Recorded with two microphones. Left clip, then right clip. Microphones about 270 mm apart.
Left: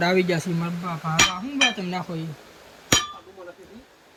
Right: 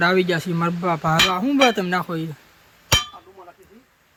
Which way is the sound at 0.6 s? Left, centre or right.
Centre.